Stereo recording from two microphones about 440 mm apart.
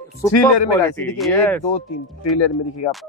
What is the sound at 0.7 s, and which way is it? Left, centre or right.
Speech, centre.